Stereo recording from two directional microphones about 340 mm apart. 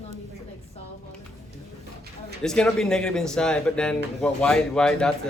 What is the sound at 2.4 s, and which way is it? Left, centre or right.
Speech, centre.